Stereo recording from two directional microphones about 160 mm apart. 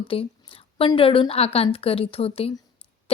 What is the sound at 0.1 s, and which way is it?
Speech, 35° left (ahead or behind).